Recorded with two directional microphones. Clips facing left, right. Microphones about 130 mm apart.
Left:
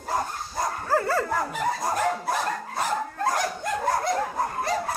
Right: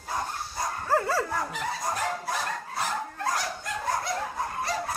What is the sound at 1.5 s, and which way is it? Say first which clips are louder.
Dog: left 5 dB; 45° left (ahead or behind).